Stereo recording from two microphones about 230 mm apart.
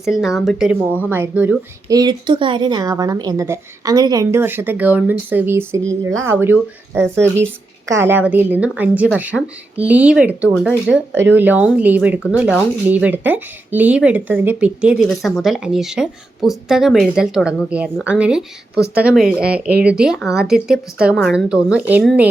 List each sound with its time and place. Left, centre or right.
0.0 s a woman's voice: centre